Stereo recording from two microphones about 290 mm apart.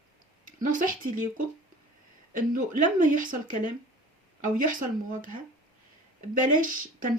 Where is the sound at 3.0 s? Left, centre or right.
Right.